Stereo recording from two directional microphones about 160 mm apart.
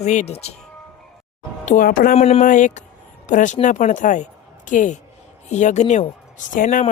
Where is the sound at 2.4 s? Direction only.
50° left (ahead or behind).